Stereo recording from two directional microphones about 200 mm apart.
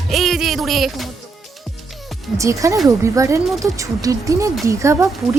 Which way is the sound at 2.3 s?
15° right (ahead or behind).